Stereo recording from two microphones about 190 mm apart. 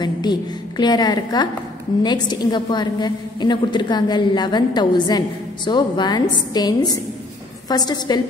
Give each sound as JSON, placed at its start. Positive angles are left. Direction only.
{"t": 0.0, "sound": "a woman's voice", "side_deg": 20}